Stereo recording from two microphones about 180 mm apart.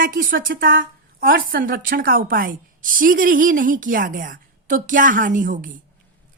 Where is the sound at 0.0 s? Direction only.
50° right (ahead or behind).